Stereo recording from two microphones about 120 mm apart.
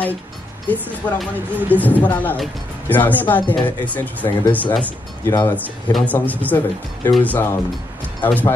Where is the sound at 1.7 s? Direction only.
15° left (ahead or behind).